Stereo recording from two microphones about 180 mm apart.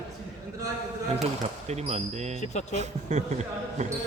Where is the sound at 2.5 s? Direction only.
40° left (ahead or behind).